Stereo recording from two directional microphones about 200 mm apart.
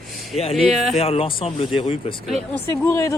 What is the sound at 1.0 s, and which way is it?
Speech, 30° left (ahead or behind).